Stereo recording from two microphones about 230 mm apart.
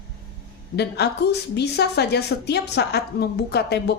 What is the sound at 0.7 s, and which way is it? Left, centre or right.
A woman's voice, left.